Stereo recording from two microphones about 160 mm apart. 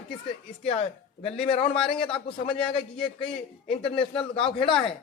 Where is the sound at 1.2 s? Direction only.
35° left (ahead or behind).